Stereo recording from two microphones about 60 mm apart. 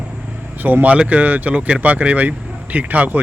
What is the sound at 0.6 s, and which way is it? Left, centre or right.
Speech, right.